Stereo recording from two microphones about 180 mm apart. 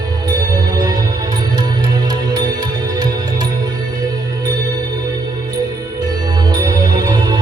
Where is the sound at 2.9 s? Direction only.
20° right (ahead or behind).